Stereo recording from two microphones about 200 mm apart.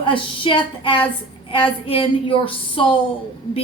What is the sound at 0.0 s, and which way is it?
A woman's voice, 25° left (ahead or behind).